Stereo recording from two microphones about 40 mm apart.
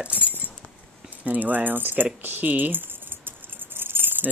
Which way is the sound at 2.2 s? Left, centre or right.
Right.